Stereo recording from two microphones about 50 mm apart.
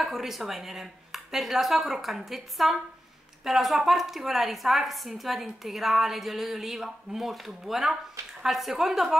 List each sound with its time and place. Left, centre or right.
0.0 s a woman's voice: centre